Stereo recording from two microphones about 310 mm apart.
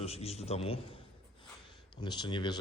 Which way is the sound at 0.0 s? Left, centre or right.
Centre.